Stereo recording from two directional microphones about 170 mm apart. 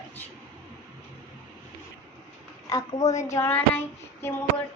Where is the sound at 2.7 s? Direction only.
20° left (ahead or behind).